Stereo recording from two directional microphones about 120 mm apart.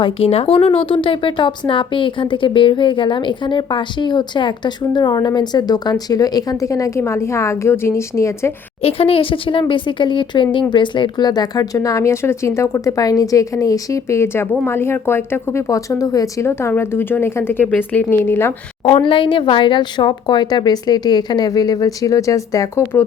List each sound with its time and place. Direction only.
0.0 s speech: 55° left (ahead or behind); by 8.5 s 20° left (ahead or behind)
8.8 s a woman's voice: 55° left (ahead or behind); by 18.5 s 20° left (ahead or behind)
18.9 s speech: 45° left (ahead or behind); by 22.8 s 25° left (ahead or behind)